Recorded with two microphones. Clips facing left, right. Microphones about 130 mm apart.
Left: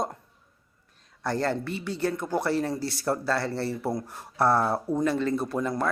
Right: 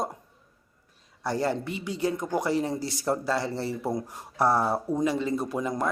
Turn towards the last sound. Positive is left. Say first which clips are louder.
# left 1 dB
turn(degrees=-15)  # may be behind; listen again after turning